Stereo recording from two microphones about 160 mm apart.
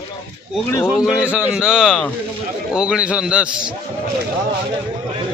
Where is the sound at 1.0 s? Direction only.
5° right (ahead or behind).